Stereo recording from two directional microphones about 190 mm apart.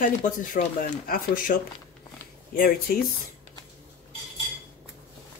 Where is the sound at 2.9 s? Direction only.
50° left (ahead or behind).